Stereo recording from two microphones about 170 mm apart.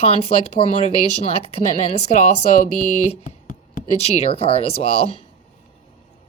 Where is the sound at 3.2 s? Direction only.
50° left (ahead or behind).